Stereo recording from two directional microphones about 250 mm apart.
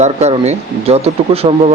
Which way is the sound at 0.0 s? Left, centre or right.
Right.